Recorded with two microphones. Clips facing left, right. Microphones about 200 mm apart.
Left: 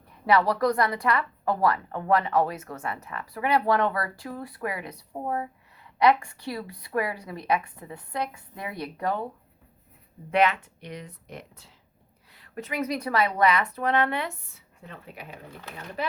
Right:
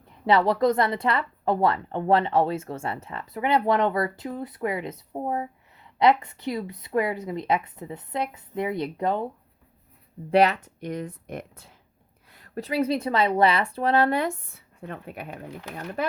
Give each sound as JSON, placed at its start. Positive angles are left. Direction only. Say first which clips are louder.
{"t": 0.3, "sound": "speech", "louder": "right 2 dB", "side_deg": -25}
{"t": 10.3, "sound": "speech", "louder": "right 3 dB", "side_deg": -40}
{"t": 12.3, "sound": "a woman's voice", "louder": "right 5 dB", "side_deg": -40}